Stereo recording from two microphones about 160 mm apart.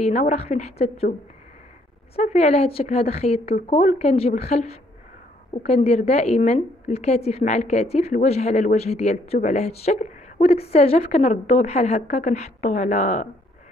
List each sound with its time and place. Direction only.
0.0 s speech: 45° left (ahead or behind)
2.1 s a woman's voice: 40° left (ahead or behind)